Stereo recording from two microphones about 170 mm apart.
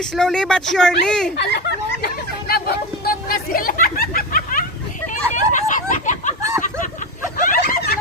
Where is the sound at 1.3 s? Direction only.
80° left; by 6.3 s 45° left (ahead or behind).